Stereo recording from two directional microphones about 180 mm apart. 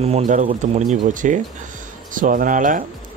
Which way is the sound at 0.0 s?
40° right (ahead or behind).